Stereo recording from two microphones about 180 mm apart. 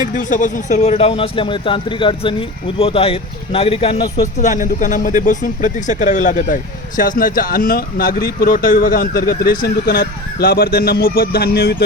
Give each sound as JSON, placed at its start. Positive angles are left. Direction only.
{"t": 0.2, "sound": "speech", "side_deg": 45}
{"t": 4.4, "sound": "speech", "side_deg": 40}